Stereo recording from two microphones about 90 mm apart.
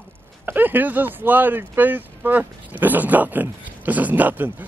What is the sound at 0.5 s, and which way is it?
Speech, 20° right (ahead or behind).